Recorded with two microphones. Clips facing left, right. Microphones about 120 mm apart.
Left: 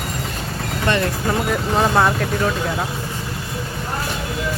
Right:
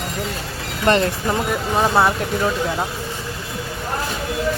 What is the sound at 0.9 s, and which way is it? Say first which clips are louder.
Speech: right 4 dB; 35° right (ahead or behind).